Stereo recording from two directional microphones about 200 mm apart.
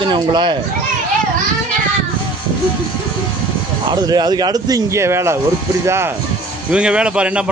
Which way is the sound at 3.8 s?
20° right (ahead or behind).